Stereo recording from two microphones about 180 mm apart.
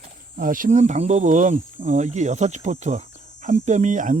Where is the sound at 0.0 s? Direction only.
50° right (ahead or behind).